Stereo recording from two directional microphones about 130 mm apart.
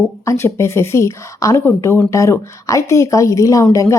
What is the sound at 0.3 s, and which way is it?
Speech, 20° left (ahead or behind).